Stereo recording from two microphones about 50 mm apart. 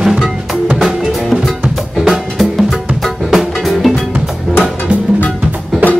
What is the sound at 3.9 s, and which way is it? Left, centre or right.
Music, centre.